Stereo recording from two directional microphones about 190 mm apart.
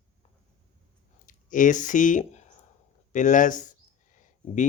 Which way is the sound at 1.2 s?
45° left (ahead or behind).